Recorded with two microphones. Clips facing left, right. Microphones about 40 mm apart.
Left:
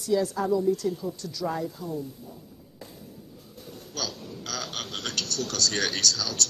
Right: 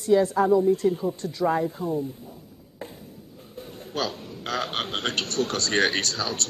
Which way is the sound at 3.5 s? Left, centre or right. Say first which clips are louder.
Right 7 dB; right.